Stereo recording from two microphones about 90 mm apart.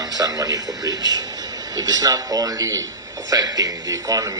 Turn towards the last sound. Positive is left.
turn(degrees=-40)  # may be behind; listen again after turning